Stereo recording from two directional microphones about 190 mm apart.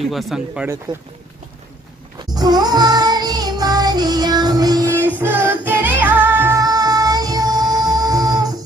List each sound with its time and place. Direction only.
0.1 s speech: centre (ahead or behind)
0.9 s speech: 20° right (ahead or behind)
2.3 s music: 20° right (ahead or behind)
4.9 s music: 10° left (ahead or behind)
5.2 s music: 10° right (ahead or behind)